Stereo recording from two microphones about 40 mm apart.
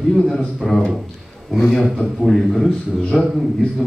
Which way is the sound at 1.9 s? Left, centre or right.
Centre.